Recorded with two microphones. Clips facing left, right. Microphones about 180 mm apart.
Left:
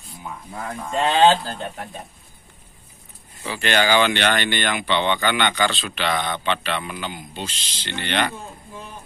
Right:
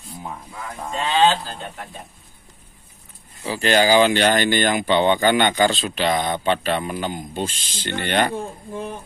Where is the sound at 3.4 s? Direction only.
35° right (ahead or behind).